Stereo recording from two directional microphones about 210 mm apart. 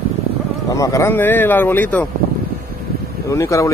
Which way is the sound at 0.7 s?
15° left (ahead or behind).